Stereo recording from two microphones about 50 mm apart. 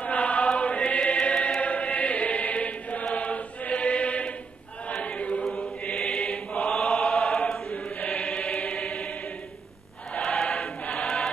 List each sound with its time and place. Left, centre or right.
0.0 s chant: left
5.0 s choir: left
5.9 s choir: centre
6.2 s mantra: left
6.7 s chant: centre
7.7 s chant: left
8.2 s choir: centre
10.5 s choir: centre